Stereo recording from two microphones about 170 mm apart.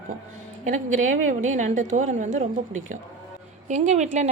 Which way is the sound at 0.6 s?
50° right (ahead or behind).